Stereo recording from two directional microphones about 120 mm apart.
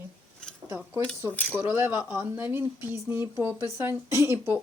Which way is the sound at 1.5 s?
20° right (ahead or behind).